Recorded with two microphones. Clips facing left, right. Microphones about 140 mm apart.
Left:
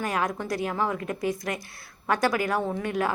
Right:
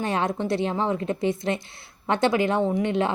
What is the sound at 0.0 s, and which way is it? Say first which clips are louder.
A woman's voice: right 3 dB; 25° right (ahead or behind).